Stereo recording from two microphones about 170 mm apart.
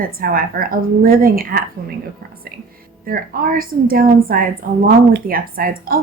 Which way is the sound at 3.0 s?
55° right (ahead or behind).